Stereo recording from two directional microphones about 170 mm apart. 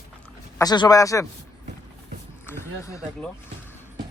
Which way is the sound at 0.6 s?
25° left (ahead or behind).